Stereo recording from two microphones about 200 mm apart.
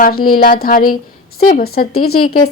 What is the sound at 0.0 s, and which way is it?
A woman's voice, 45° left (ahead or behind).